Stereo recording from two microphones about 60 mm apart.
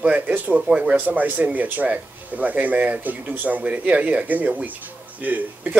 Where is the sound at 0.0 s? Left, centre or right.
Right.